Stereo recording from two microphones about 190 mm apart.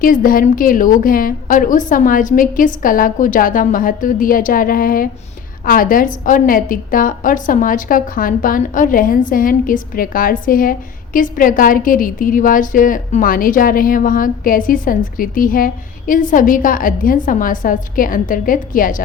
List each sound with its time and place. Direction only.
0.0 s a woman's voice: 45° left (ahead or behind)